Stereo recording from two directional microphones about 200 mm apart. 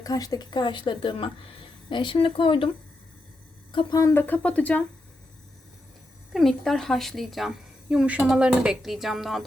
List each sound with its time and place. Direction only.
0.0 s speech: 20° left (ahead or behind)
3.7 s a woman's voice: 20° left (ahead or behind); by 4.9 s 5° left (ahead or behind)
6.3 s a woman's voice: centre (ahead or behind)